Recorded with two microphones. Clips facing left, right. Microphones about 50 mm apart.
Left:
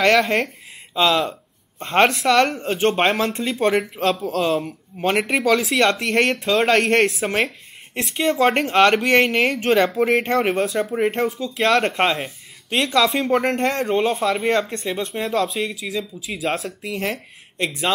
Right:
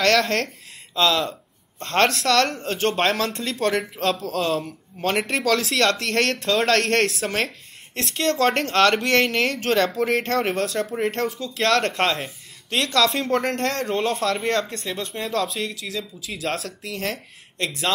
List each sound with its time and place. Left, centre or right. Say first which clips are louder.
0.0 s speech: left 3 dB; centre